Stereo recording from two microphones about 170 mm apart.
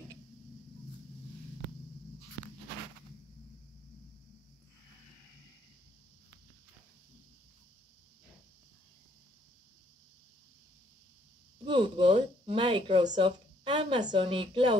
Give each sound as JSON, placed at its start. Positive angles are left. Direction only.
{"t": 11.6, "sound": "speech", "side_deg": -30}